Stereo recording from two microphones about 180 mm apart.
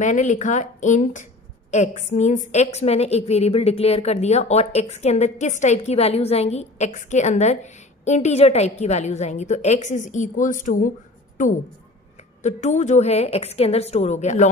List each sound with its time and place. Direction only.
0.0 s a woman's voice: 40° left (ahead or behind)